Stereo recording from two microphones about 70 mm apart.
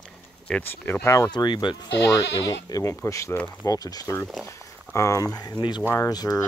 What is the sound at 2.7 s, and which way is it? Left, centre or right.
Speech, left.